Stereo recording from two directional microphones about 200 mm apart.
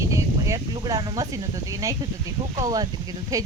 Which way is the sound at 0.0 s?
15° right (ahead or behind).